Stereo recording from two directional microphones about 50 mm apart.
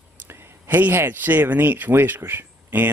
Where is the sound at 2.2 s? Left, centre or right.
Right.